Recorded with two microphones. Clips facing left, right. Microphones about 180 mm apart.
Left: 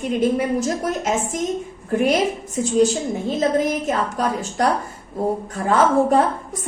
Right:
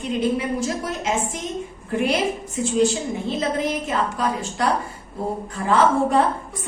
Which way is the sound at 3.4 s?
45° left (ahead or behind).